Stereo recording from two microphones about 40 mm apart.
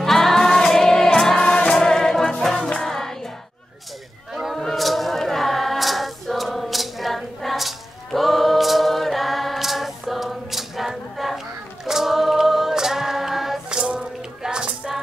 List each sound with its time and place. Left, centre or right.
0.0 s music: centre
1.4 s music: left
4.6 s choir: centre
13.7 s rattle: centre